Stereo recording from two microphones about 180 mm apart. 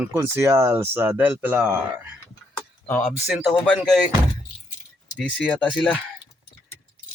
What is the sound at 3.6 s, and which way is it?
Speech, 5° left (ahead or behind).